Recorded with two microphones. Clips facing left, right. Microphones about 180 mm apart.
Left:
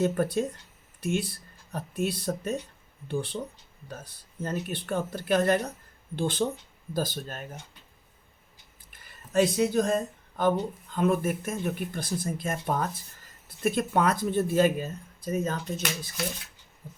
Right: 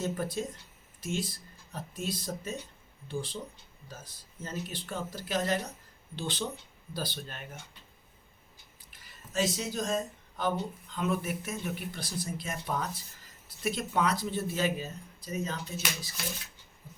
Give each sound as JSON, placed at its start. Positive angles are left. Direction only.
{"t": 0.0, "sound": "speech", "side_deg": 60}
{"t": 8.9, "sound": "speech", "side_deg": 55}